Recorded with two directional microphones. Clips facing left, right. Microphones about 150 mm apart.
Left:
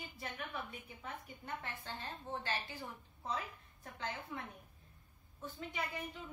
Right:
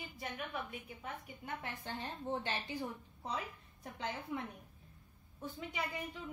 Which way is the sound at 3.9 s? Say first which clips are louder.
Right 3 dB; 20° right (ahead or behind).